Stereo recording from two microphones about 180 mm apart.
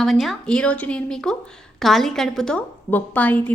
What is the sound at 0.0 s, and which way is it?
A woman's voice, centre (ahead or behind).